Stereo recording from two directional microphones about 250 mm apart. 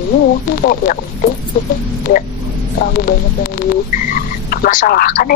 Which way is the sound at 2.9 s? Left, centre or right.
Left.